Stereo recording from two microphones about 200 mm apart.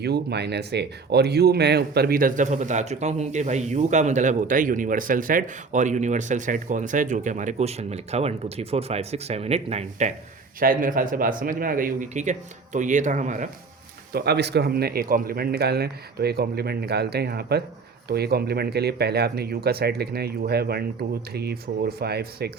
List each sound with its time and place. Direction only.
0.0 s speech: 55° right (ahead or behind); by 10.1 s 30° right (ahead or behind)
10.6 s speech: 45° right (ahead or behind)
14.1 s speech: 55° right (ahead or behind)